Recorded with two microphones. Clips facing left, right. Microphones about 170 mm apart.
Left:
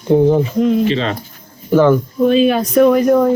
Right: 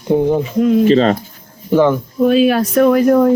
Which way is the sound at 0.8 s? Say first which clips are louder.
Right 6 dB; 40° right (ahead or behind).